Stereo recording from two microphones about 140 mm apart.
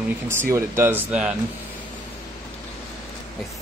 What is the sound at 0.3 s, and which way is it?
Speech, 20° right (ahead or behind).